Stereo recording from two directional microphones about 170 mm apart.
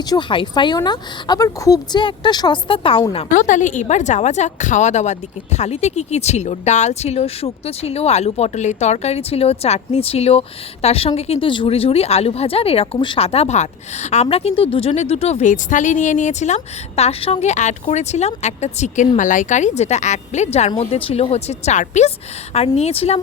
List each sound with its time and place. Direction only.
0.1 s speech: 30° left (ahead or behind)
3.2 s speech: 50° left (ahead or behind)